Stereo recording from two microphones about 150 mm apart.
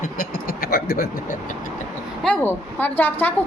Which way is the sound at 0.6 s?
90° left.